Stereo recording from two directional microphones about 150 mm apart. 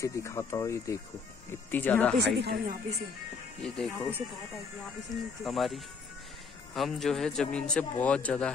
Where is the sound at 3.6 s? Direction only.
5° left (ahead or behind).